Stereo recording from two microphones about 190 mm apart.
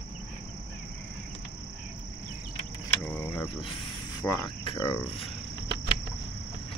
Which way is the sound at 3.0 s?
10° left (ahead or behind).